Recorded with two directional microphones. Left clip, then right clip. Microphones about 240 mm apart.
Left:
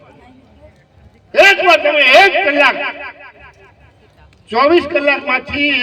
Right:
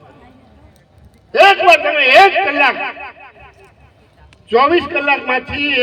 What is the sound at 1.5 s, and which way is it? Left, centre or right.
A man's voice, left.